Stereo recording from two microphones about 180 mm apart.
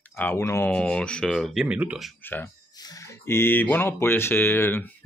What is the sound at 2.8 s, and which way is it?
Speech, 20° left (ahead or behind).